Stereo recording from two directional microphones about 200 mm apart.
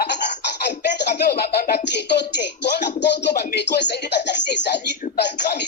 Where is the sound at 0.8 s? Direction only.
55° left (ahead or behind).